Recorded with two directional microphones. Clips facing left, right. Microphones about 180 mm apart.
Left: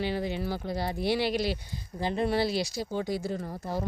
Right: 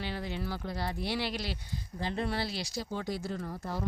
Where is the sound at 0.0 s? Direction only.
15° left (ahead or behind).